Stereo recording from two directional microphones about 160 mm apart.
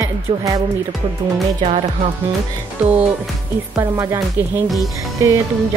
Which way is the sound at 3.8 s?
15° right (ahead or behind).